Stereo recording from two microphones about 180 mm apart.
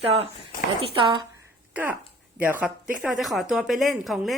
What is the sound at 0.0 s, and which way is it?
Speech, 35° right (ahead or behind).